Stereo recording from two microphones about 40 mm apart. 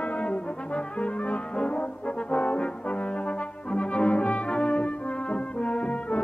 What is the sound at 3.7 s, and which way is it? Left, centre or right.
Brass instrument, left.